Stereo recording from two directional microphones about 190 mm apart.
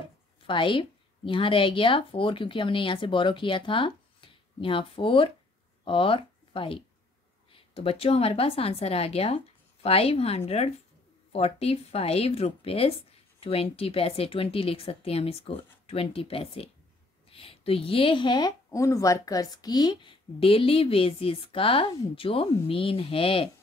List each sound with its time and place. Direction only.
0.5 s a woman's voice: 25° left (ahead or behind)